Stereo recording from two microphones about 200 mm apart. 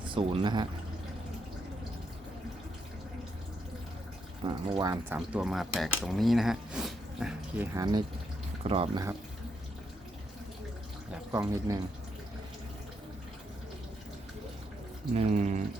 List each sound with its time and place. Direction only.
0.0 s speech: 25° right (ahead or behind)
4.4 s speech: 20° right (ahead or behind)
8.6 s speech: 30° right (ahead or behind)
11.1 s a sound: 5° right (ahead or behind)
11.7 s speech: 15° right (ahead or behind)
15.1 s speech: 35° right (ahead or behind)